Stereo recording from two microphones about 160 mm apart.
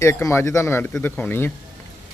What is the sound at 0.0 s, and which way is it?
A man's voice, 15° left (ahead or behind).